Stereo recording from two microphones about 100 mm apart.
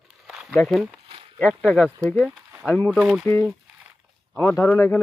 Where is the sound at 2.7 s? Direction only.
20° left (ahead or behind).